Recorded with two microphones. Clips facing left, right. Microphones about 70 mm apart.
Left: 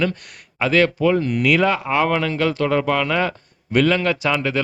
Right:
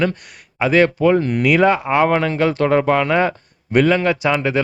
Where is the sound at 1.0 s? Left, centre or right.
Right.